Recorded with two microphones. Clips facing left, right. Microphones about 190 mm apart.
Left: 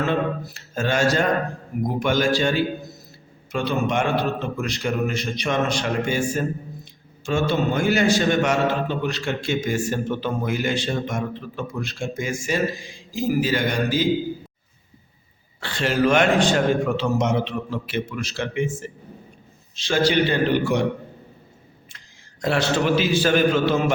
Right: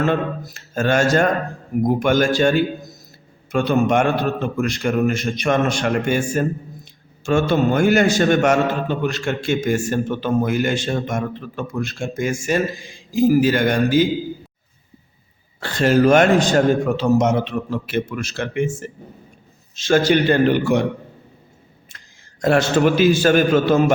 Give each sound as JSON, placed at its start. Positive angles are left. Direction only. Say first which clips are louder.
{"t": 0.4, "sound": "a man's voice", "louder": "right 4 dB", "side_deg": -50}
{"t": 15.6, "sound": "a man's voice", "louder": "right 6 dB", "side_deg": -45}
{"t": 21.9, "sound": "a man's voice", "louder": "right 1 dB", "side_deg": -45}